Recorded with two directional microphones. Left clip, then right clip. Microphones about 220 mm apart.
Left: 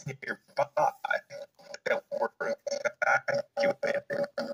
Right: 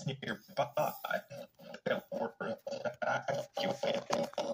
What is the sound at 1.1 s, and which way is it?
Burping, 10° left (ahead or behind).